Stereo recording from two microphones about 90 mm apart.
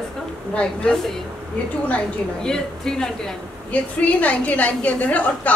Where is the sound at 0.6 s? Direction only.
5° left (ahead or behind).